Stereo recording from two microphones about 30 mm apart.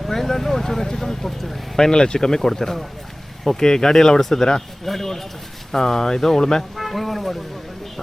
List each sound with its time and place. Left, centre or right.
0.1 s speech: centre
5.7 s speech: centre
6.7 s a sound: centre